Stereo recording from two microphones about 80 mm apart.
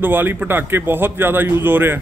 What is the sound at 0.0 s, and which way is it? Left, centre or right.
A man's voice, right.